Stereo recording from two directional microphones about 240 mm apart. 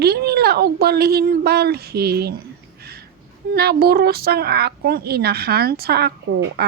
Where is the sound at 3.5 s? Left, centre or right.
Right.